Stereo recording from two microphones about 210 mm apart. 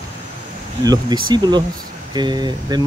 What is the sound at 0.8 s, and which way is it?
Speech, 20° right (ahead or behind).